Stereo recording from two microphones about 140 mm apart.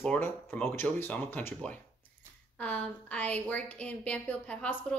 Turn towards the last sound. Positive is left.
turn(degrees=10)  # may be behind; listen again after turning